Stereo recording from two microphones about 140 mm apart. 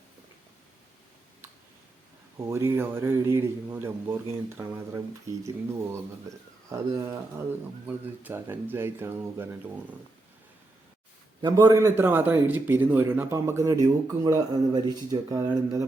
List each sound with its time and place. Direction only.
2.4 s a man's voice: 20° right (ahead or behind)
6.7 s a man's voice: 20° right (ahead or behind)
11.4 s a man's voice: 25° right (ahead or behind)